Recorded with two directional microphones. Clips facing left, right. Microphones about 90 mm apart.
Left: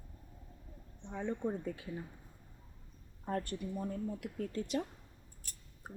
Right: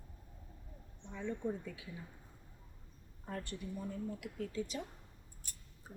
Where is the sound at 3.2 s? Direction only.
55° left (ahead or behind).